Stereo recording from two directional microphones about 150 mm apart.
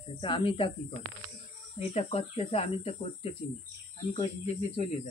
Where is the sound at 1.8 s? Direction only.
40° left (ahead or behind).